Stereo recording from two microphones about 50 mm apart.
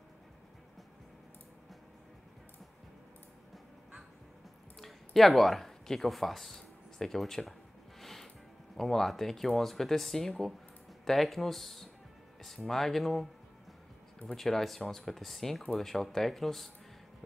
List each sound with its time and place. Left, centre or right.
4.7 s speech: centre
8.0 s music: centre
8.7 s speech: centre